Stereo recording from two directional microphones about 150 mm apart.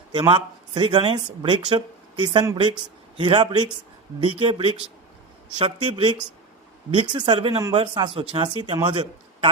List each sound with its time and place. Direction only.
0.1 s speech: 30° right (ahead or behind)